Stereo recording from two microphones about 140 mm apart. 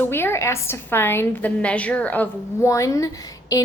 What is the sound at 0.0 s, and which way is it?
A woman's voice, 15° left (ahead or behind).